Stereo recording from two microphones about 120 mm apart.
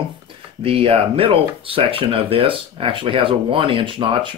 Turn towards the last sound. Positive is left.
turn(degrees=-45)  # may be behind; listen again after turning